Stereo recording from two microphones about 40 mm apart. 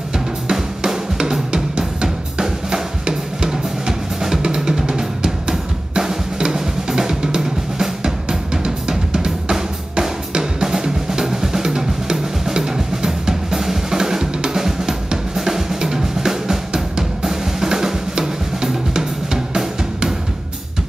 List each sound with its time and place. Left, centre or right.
0.5 s drum: centre